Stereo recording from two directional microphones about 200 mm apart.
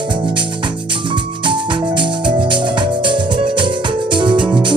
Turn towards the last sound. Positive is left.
turn(degrees=-25)  # may be behind; listen again after turning